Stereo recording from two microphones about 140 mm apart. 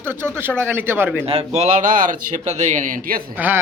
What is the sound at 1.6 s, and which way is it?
A man's voice, 65° right (ahead or behind).